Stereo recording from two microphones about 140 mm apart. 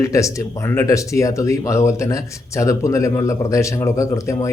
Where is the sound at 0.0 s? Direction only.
25° left (ahead or behind).